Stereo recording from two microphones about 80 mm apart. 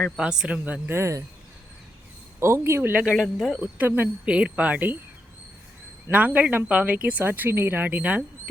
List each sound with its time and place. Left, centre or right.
0.2 s speech: centre; by 1.2 s right
2.4 s a man's voice: right
2.9 s speech: centre
3.2 s speech: centre
3.8 s speech: right
4.3 s speech: centre
6.1 s speech: centre